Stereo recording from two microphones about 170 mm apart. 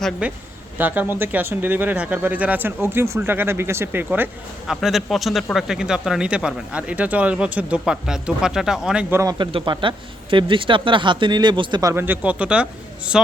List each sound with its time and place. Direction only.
0.0 s speech: 5° right (ahead or behind)
4.7 s speech: centre (ahead or behind)
9.4 s speech: 30° right (ahead or behind); by 13.2 s 5° right (ahead or behind)